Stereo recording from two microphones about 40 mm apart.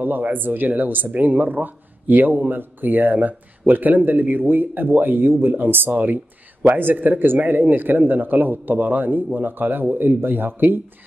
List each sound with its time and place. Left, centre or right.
0.0 s speech: right